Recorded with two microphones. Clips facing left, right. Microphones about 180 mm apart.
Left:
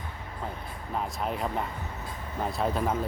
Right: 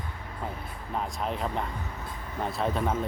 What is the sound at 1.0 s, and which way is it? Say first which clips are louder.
Speech: even; centre (ahead or behind).